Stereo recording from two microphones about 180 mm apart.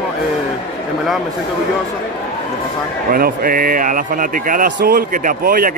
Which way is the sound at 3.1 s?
55° right (ahead or behind).